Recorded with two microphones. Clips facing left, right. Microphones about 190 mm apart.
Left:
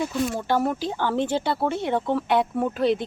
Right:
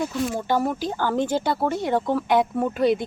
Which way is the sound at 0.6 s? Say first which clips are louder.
Even; 10° left (ahead or behind).